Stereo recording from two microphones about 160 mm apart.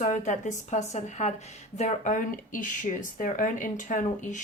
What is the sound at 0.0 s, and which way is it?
Speech, 50° left (ahead or behind).